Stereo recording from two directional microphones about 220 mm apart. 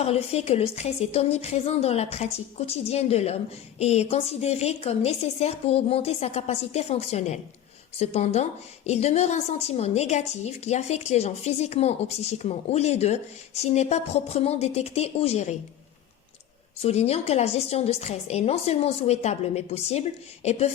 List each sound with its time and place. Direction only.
0.0 s a woman's voice: 25° left (ahead or behind)
16.8 s a woman's voice: 30° left (ahead or behind)